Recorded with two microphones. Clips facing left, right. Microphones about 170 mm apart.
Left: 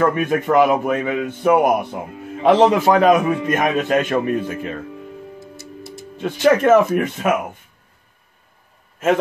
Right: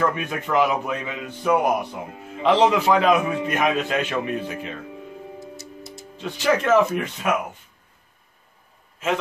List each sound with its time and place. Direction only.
0.1 s a man's voice: 50° left (ahead or behind)
5.6 s music: 55° left (ahead or behind)